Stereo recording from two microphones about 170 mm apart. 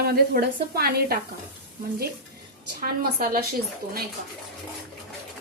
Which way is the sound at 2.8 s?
60° right (ahead or behind).